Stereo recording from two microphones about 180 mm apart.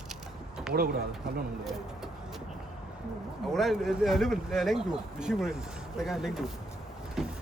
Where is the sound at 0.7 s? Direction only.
55° right (ahead or behind).